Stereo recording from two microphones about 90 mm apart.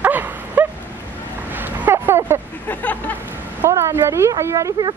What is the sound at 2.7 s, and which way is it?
Speech, 20° left (ahead or behind).